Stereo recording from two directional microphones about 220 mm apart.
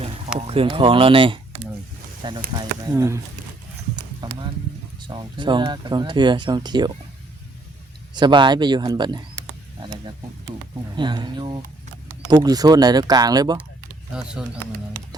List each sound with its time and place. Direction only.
0.3 s speech: 25° right (ahead or behind)
3.9 s horse: 20° right (ahead or behind)
4.9 s speech: 20° right (ahead or behind)
8.1 s speech: 20° right (ahead or behind)
10.9 s speech: 20° right (ahead or behind)
14.1 s speech: 5° right (ahead or behind)